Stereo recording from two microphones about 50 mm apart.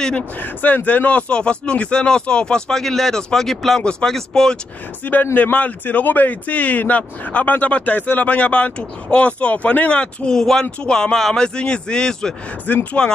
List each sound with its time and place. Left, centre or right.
0.4 s speech: left; by 3.8 s centre
3.8 s speech: centre
5.0 s a man's voice: left; by 12.4 s centre
12.7 s a man's voice: left